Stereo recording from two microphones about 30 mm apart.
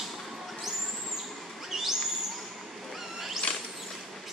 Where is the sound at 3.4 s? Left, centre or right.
Left.